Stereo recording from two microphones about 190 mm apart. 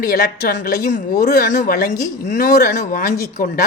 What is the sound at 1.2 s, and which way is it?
Speech, 55° left (ahead or behind).